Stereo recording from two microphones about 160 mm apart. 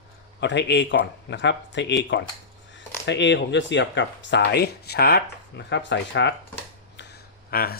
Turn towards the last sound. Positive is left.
turn(degrees=75)  # may be behind; listen again after turning